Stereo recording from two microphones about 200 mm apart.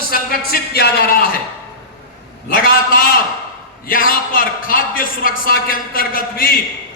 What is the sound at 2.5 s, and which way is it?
A man's voice, 45° left (ahead or behind).